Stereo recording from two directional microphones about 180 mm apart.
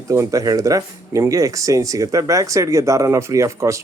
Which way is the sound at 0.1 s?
15° right (ahead or behind).